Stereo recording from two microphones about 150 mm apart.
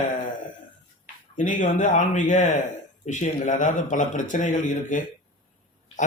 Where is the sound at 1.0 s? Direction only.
60° left (ahead or behind).